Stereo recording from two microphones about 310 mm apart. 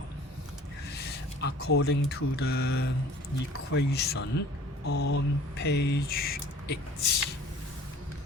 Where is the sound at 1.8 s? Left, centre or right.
Left.